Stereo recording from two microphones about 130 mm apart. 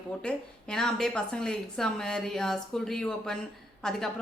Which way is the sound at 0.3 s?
5° left (ahead or behind).